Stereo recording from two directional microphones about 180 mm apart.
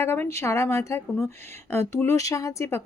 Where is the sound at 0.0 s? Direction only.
15° left (ahead or behind).